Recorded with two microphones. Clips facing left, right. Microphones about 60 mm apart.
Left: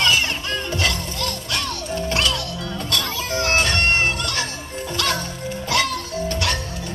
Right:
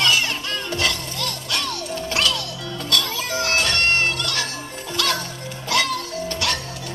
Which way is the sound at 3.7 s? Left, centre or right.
Centre.